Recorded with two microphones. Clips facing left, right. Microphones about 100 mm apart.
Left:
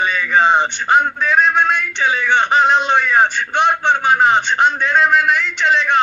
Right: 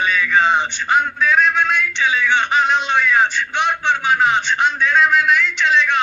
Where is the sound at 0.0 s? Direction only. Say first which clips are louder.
Even; 15° left (ahead or behind).